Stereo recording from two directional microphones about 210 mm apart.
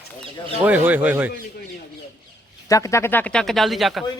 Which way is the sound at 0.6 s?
10° right (ahead or behind).